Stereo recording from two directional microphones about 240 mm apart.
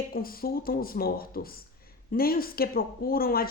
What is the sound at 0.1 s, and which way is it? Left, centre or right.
Speech, left.